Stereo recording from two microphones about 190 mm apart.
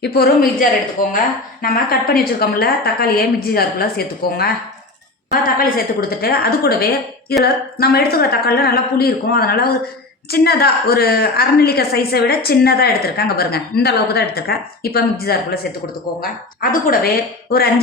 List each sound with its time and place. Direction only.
0.0 s a woman's voice: 55° left (ahead or behind)